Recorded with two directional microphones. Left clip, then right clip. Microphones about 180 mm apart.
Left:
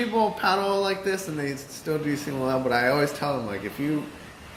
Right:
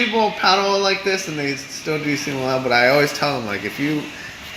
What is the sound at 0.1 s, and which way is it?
A man's voice, 20° right (ahead or behind).